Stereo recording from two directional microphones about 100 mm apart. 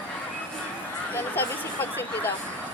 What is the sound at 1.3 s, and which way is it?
Speech, 20° left (ahead or behind).